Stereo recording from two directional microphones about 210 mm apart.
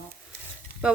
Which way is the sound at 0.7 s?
45° right (ahead or behind).